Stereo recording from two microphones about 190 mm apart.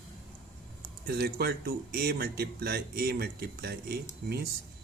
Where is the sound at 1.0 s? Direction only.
55° right (ahead or behind).